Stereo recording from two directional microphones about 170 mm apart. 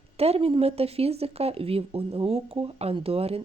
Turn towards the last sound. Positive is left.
turn(degrees=-35)  # may be behind; listen again after turning